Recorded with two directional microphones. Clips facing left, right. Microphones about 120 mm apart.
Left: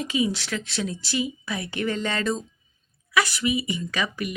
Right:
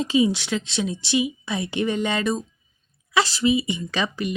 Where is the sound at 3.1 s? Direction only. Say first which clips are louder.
Right 4 dB; 30° right (ahead or behind).